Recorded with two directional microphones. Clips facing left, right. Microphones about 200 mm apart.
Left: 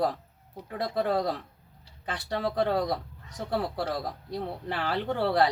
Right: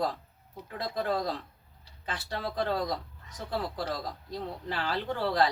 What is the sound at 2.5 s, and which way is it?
Speech, 60° left (ahead or behind).